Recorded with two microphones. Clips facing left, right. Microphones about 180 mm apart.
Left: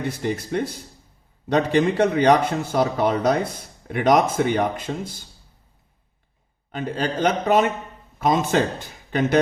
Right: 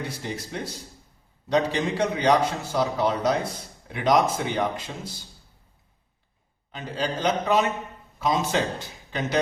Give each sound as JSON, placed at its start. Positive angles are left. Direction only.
{"t": 0.0, "sound": "a man's voice", "side_deg": 55}
{"t": 6.7, "sound": "speech", "side_deg": 50}